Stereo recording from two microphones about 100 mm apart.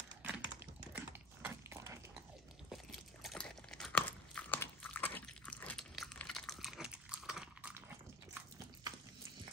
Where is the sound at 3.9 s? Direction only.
15° left (ahead or behind).